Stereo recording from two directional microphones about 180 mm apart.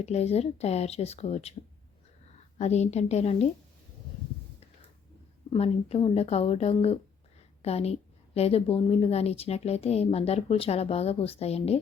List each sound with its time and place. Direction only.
0.0 s a woman's voice: 35° left (ahead or behind)
2.6 s a woman's voice: 40° left (ahead or behind)
5.5 s a woman's voice: 35° left (ahead or behind)